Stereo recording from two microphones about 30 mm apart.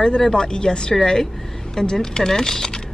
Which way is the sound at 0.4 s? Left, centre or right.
Left.